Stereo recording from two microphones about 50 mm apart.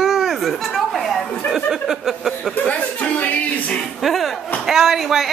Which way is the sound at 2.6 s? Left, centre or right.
Left.